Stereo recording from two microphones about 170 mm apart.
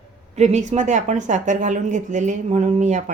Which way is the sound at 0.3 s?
40° right (ahead or behind).